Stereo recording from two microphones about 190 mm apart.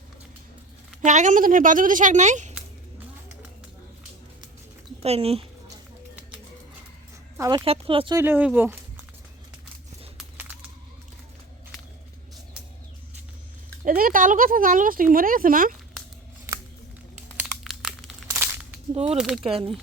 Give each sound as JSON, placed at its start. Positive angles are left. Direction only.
{"t": 1.0, "sound": "a woman's voice", "side_deg": -40}
{"t": 5.0, "sound": "a woman's voice", "side_deg": -30}
{"t": 7.3, "sound": "speech", "side_deg": -15}
{"t": 7.6, "sound": "speech", "side_deg": -30}
{"t": 8.1, "sound": "speech", "side_deg": -10}
{"t": 13.8, "sound": "speech", "side_deg": -45}
{"t": 17.6, "sound": "crumpling", "side_deg": 0}
{"t": 18.3, "sound": "a sound", "side_deg": -10}
{"t": 19.1, "sound": "speech", "side_deg": 0}
{"t": 19.5, "sound": "speech", "side_deg": -30}